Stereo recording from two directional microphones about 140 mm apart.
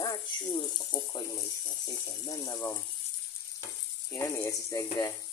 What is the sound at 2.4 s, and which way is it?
Speech, 20° left (ahead or behind).